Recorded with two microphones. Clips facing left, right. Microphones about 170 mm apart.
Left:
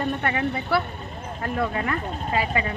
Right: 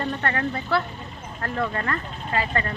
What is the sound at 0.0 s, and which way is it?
Speech, 10° left (ahead or behind).